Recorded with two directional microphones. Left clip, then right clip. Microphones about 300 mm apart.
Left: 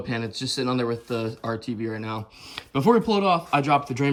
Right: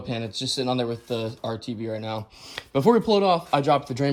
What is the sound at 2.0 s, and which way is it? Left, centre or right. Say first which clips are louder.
Speech: right 1 dB; centre.